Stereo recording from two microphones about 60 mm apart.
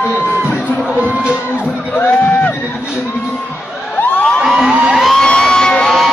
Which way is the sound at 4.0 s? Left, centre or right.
Left.